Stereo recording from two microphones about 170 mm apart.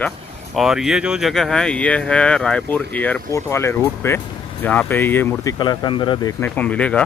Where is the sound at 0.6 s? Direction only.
Centre (ahead or behind); by 6.3 s 25° left (ahead or behind).